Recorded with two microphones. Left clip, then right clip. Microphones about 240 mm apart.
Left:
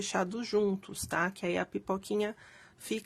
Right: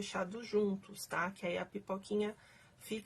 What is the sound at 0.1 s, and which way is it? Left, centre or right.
Speech, left.